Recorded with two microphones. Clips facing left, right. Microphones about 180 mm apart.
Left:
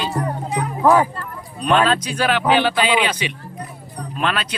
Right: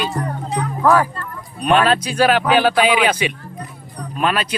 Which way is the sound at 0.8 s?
20° left (ahead or behind).